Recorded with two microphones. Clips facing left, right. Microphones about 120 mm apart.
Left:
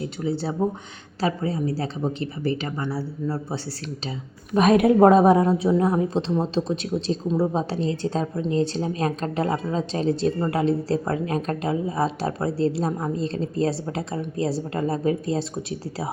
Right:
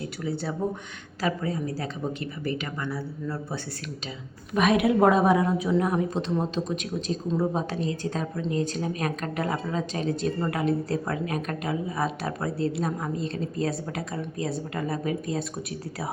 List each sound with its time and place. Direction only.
0.2 s a woman's voice: 30° left (ahead or behind)
4.5 s a woman's voice: 40° left (ahead or behind)